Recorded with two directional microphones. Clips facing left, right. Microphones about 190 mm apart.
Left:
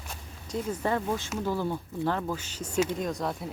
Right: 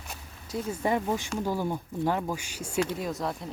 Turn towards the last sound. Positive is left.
turn(degrees=0)  # may be behind; listen again after turning